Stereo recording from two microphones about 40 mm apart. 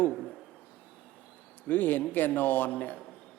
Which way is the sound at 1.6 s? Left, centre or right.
Left.